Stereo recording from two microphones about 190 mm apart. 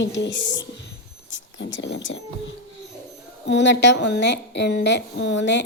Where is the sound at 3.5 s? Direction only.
65° left (ahead or behind).